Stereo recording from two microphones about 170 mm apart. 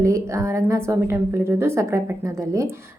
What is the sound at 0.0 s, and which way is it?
A woman's voice, 15° right (ahead or behind).